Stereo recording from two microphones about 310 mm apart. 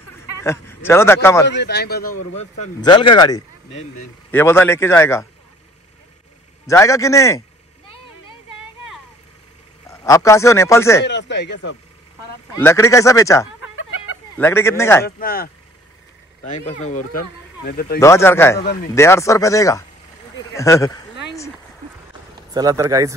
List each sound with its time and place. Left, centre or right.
0.4 s speech: centre
1.5 s a man's voice: left
2.8 s speech: centre
6.7 s speech: centre
9.8 s a man's voice: centre
11.1 s a man's voice: left
12.5 s speech: centre
15.0 s speech: left
16.5 s a man's voice: left
18.0 s speech: centre
22.5 s speech: centre